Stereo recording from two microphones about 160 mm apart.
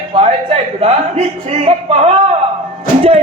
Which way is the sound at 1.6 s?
40° right (ahead or behind).